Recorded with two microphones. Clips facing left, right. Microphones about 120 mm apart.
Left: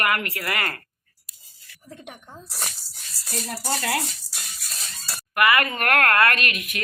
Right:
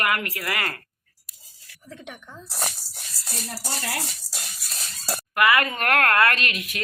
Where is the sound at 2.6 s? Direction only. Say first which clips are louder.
Right 6 dB; 25° right (ahead or behind).